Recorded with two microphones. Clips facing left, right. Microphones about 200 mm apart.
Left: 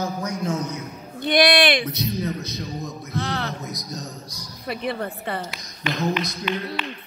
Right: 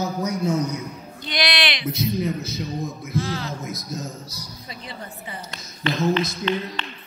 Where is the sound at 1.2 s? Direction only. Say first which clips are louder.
Left 8 dB; 55° left (ahead or behind).